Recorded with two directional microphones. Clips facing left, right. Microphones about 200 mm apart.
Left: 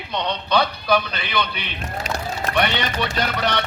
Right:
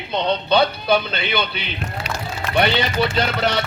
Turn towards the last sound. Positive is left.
turn(degrees=-30)  # may be behind; listen again after turning